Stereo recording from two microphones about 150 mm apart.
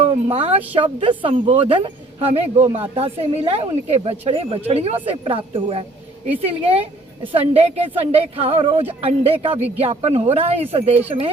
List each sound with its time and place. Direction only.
0.0 s a woman's voice: 40° right (ahead or behind)